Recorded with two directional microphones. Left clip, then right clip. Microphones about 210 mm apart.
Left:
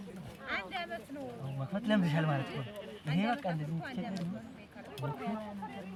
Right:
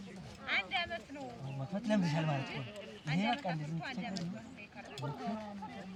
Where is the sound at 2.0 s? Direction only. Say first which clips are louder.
Left 3 dB; 20° left (ahead or behind).